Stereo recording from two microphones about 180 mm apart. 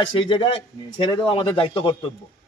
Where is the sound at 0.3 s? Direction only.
30° left (ahead or behind).